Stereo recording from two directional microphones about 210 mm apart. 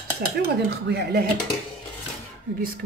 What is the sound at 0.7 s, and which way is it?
Speech, 50° right (ahead or behind).